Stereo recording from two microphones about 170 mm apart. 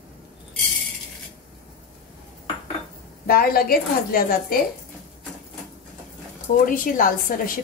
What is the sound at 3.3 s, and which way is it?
A woman's voice, 60° left (ahead or behind).